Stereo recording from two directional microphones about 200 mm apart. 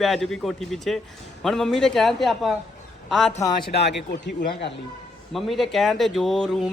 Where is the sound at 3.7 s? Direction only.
55° left (ahead or behind).